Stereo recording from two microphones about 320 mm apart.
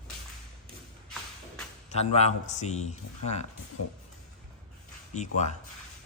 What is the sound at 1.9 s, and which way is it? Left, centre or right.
A man's voice, centre.